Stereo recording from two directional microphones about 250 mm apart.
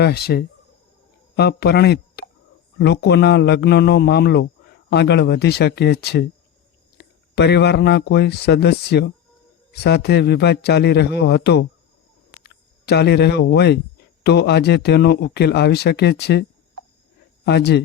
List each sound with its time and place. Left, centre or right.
0.0 s speech: left